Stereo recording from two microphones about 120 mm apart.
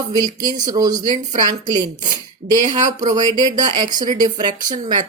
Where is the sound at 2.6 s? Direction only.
90° right.